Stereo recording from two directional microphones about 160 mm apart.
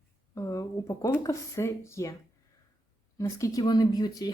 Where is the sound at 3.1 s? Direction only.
20° left (ahead or behind).